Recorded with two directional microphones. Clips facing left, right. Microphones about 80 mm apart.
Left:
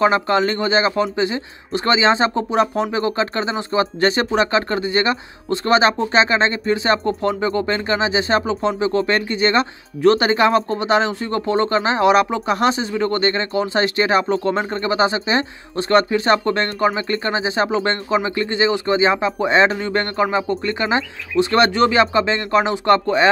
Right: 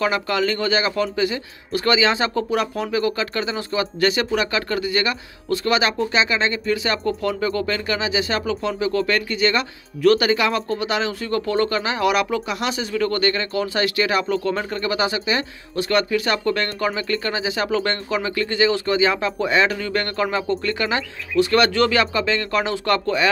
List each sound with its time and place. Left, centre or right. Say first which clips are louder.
0.0 s speech: left 5 dB; left